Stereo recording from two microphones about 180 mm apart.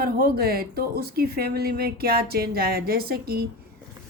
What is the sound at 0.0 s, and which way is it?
Speech, 60° right (ahead or behind).